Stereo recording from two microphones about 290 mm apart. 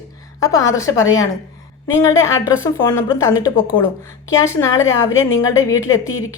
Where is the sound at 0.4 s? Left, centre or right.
Centre.